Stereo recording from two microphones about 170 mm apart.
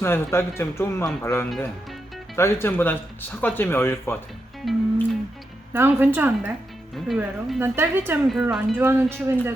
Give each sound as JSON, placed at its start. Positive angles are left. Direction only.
{"t": 0.0, "sound": "speech", "side_deg": 15}
{"t": 4.6, "sound": "speech", "side_deg": 0}
{"t": 5.7, "sound": "a woman's voice", "side_deg": -15}
{"t": 6.9, "sound": "speech", "side_deg": 0}
{"t": 7.6, "sound": "a woman's voice", "side_deg": -15}
{"t": 8.9, "sound": "a woman's voice", "side_deg": -15}